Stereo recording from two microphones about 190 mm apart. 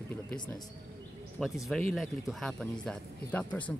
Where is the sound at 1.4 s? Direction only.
5° left (ahead or behind).